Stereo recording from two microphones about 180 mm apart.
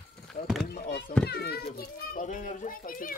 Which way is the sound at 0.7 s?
65° left (ahead or behind).